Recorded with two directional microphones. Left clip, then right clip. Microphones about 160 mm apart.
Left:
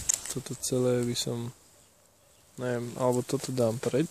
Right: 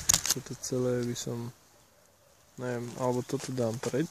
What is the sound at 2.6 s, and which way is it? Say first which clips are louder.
Speech: left 3 dB; 10° left (ahead or behind).